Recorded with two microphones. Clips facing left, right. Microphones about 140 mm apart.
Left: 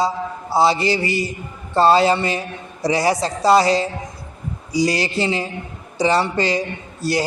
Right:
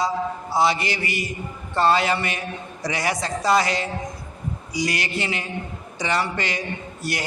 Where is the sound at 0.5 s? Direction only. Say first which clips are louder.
Left 5 dB; 30° left (ahead or behind).